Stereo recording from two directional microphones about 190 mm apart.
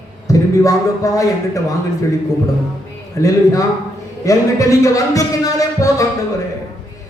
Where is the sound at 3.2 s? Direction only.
15° left (ahead or behind).